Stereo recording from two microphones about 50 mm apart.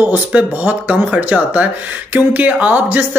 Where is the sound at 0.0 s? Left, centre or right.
Right.